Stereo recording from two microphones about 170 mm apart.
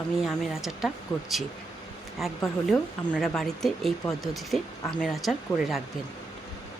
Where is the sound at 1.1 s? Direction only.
30° left (ahead or behind).